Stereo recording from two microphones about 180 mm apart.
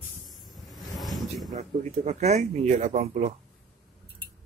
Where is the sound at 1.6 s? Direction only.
40° right (ahead or behind).